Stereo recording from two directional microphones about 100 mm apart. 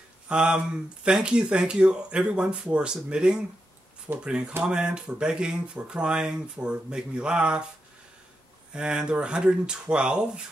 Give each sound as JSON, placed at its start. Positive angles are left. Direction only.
{"t": 0.3, "sound": "speech", "side_deg": -10}
{"t": 8.7, "sound": "speech", "side_deg": -10}